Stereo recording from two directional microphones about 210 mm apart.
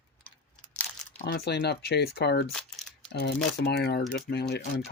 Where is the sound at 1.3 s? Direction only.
50° left (ahead or behind).